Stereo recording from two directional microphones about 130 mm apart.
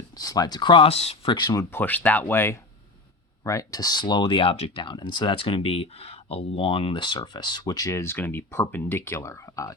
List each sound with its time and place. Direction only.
0.2 s speech: 30° left (ahead or behind); by 1.3 s 50° left (ahead or behind)
1.3 s speech: 30° left (ahead or behind)
1.7 s speech: 15° left (ahead or behind); by 4.8 s 50° left (ahead or behind)
4.8 s speech: 35° left (ahead or behind)